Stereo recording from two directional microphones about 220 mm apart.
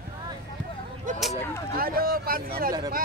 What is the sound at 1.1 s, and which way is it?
Speech, 35° right (ahead or behind).